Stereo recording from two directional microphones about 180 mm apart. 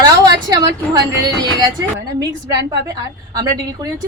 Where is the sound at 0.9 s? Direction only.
20° right (ahead or behind).